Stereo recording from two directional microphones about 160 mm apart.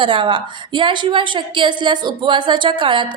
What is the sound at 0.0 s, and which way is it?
A woman's voice, 30° right (ahead or behind).